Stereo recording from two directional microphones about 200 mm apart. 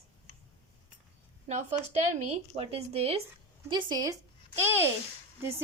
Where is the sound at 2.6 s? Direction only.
30° right (ahead or behind).